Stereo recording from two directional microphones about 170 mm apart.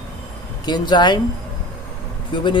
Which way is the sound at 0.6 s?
25° left (ahead or behind).